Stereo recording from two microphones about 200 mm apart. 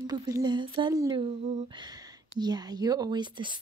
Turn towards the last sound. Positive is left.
turn(degrees=-20)  # may be behind; listen again after turning